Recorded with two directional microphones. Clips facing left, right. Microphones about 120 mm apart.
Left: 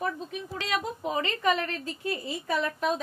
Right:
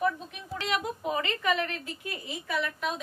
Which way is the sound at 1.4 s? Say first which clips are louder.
Left 2 dB; 35° left (ahead or behind).